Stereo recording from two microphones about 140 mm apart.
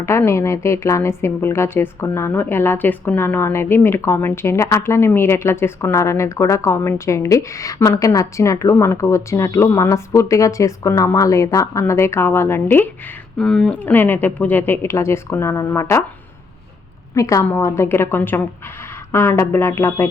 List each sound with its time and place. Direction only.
0.0 s a woman's voice: 20° left (ahead or behind)
13.4 s speech: 5° left (ahead or behind); by 16.0 s 20° left (ahead or behind)
17.2 s a woman's voice: 25° left (ahead or behind)